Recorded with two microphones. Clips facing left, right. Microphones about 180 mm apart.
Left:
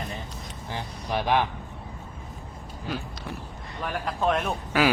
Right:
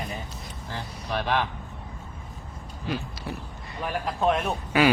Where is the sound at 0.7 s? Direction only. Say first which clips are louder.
Left 2 dB; 15° left (ahead or behind).